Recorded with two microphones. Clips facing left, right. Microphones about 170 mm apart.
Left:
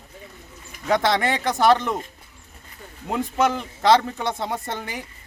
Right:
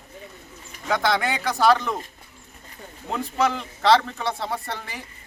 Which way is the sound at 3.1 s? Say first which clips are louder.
Left 2 dB; 20° left (ahead or behind).